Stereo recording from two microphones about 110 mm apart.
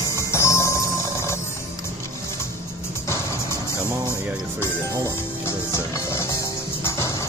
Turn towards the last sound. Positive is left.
turn(degrees=25)  # may be behind; listen again after turning